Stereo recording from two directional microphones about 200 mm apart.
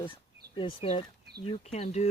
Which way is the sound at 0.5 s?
30° left (ahead or behind).